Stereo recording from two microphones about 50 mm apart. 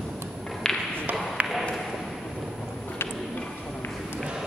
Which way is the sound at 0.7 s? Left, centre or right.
Centre.